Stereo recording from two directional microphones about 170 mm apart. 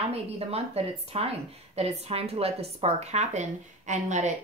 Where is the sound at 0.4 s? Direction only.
35° right (ahead or behind).